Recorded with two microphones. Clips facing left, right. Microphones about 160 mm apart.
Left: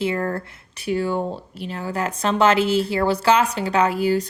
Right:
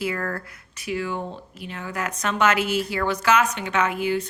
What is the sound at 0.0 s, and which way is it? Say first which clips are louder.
Speech: left 4 dB; 25° left (ahead or behind).